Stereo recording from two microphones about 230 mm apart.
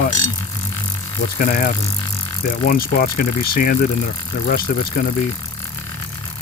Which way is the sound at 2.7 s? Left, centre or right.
Left.